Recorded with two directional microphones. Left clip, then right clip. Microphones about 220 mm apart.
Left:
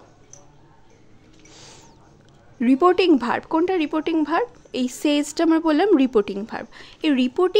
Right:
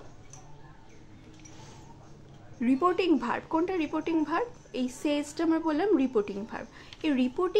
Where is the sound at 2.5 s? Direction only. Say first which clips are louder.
Left 9 dB; 40° left (ahead or behind).